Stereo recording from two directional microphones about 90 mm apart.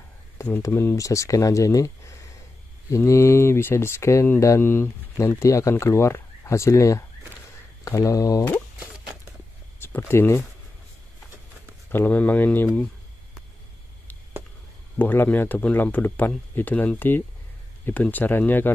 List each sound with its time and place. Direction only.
0.6 s speech: 30° left (ahead or behind)
9.8 s speech: 25° left (ahead or behind)
11.9 s speech: 20° left (ahead or behind)
15.0 s speech: 20° left (ahead or behind)